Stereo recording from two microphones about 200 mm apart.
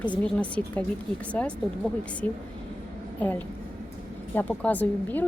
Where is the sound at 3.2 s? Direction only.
10° left (ahead or behind).